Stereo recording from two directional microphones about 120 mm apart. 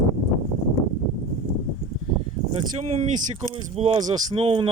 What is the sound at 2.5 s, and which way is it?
Speech, 50° right (ahead or behind).